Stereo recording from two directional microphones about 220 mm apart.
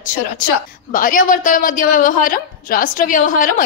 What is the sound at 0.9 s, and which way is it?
A woman's voice, 40° left (ahead or behind).